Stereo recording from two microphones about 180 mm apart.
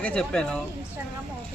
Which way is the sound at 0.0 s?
5° left (ahead or behind).